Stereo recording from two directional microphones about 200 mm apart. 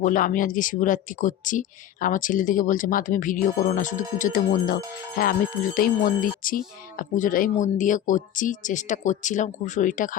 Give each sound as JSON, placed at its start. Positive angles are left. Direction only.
{"t": 0.0, "sound": "music", "side_deg": 40}